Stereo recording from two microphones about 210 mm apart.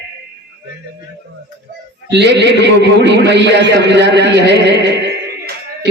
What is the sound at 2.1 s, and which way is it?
A man's voice, 55° right (ahead or behind).